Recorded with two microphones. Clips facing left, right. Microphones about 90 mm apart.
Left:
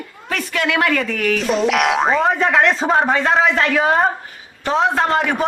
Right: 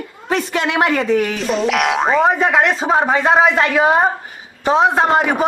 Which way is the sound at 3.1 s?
15° right (ahead or behind).